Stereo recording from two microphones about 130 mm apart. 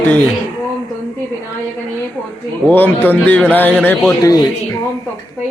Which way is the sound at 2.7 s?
15° left (ahead or behind).